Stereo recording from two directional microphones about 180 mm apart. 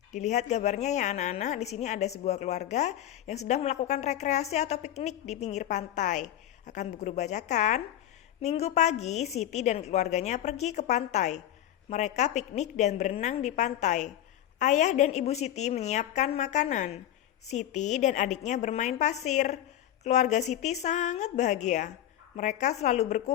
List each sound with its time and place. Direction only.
0.1 s speech: 40° left (ahead or behind)